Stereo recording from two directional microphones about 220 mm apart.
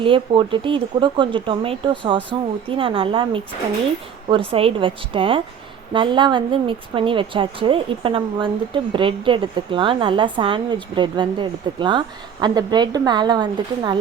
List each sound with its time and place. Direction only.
0.0 s a woman's voice: 25° right (ahead or behind)